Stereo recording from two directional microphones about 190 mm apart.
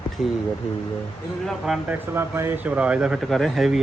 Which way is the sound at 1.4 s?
5° right (ahead or behind).